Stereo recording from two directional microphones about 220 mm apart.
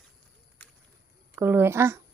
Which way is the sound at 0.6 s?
5° left (ahead or behind).